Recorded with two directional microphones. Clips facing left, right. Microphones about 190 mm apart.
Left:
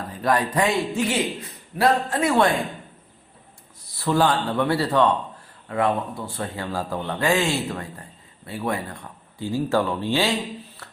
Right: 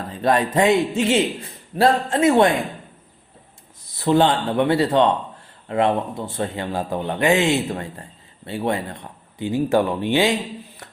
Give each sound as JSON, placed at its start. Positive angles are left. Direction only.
{"t": 0.1, "sound": "speech", "side_deg": -25}
{"t": 3.9, "sound": "speech", "side_deg": -20}